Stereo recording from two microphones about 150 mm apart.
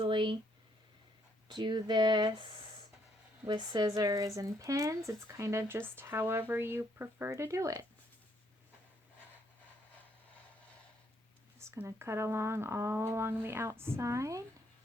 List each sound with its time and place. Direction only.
0.0 s a sound: 35° right (ahead or behind)
1.5 s speech: 30° right (ahead or behind)
11.6 s speech: 20° right (ahead or behind)